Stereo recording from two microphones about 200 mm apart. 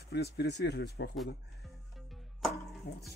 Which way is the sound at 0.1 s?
55° left (ahead or behind).